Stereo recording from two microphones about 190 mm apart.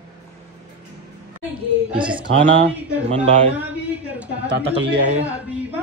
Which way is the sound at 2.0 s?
25° right (ahead or behind).